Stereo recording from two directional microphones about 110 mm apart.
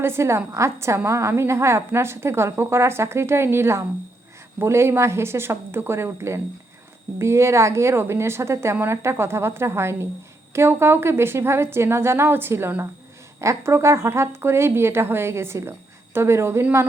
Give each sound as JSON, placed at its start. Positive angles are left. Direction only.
{"t": 0.0, "sound": "a woman's voice", "side_deg": -25}